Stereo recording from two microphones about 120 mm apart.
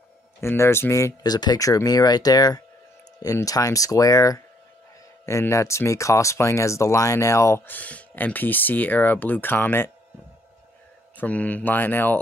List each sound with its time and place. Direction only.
0.4 s speech: 20° left (ahead or behind)
11.1 s speech: 10° left (ahead or behind)